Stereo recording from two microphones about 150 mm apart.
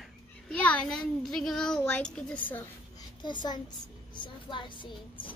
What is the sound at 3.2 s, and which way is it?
Speech, 30° left (ahead or behind).